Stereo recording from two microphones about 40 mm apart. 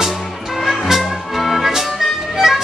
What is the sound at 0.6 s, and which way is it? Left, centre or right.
Music, centre.